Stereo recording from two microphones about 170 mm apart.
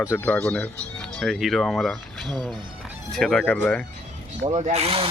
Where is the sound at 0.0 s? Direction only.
10° left (ahead or behind).